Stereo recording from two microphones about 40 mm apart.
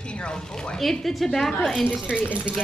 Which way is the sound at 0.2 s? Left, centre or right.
Left.